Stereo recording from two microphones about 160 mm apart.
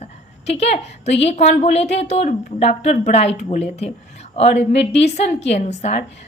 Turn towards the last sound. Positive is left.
turn(degrees=45)  # may be behind; listen again after turning